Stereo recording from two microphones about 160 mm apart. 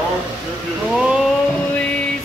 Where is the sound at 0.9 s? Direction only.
5° right (ahead or behind).